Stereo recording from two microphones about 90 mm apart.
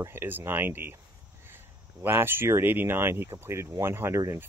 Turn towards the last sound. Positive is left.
turn(degrees=-30)  # may be behind; listen again after turning